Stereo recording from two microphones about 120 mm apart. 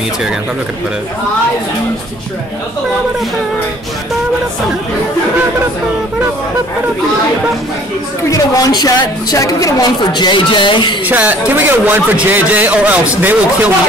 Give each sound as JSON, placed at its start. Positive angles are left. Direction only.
{"t": 8.3, "sound": "a woman's voice", "side_deg": 30}
{"t": 11.1, "sound": "a man's voice", "side_deg": -15}